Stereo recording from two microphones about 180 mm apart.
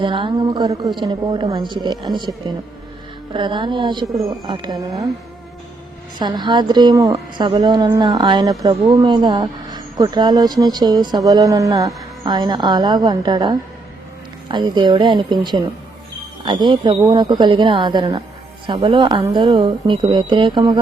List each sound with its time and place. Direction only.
0.0 s a woman's voice: 25° right (ahead or behind)
6.1 s a woman's voice: 25° right (ahead or behind)